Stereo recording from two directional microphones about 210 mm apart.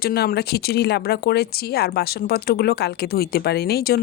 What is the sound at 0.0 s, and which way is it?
Speech, 45° left (ahead or behind).